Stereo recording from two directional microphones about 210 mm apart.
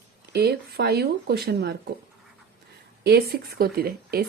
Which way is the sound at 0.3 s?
50° right (ahead or behind).